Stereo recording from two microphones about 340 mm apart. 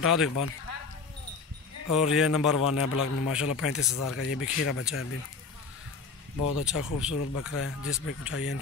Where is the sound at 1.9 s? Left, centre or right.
Centre.